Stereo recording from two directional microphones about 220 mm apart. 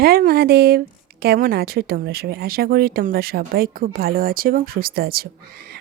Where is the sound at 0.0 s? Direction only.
45° right (ahead or behind).